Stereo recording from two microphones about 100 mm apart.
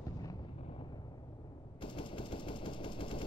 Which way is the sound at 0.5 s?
65° left (ahead or behind).